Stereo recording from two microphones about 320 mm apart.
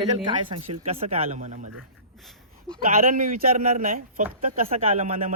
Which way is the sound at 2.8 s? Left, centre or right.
Right.